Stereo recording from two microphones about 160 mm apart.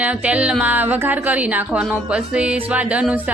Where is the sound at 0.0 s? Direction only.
10° right (ahead or behind).